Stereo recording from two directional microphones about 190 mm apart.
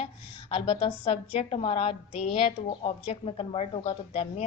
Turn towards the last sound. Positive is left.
turn(degrees=30)  # may be behind; listen again after turning